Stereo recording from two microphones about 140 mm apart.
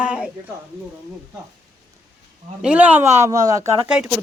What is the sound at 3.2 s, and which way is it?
Speech, 25° right (ahead or behind).